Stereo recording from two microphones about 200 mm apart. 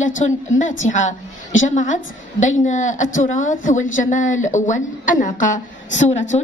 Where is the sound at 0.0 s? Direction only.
40° left (ahead or behind).